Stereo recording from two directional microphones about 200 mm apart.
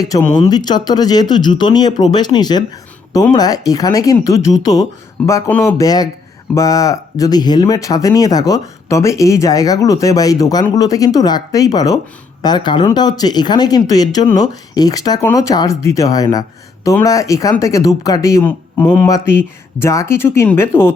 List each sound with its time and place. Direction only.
0.3 s speech: 20° left (ahead or behind)